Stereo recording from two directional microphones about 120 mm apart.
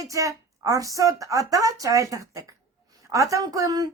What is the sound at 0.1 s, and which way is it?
A woman's voice, 30° right (ahead or behind).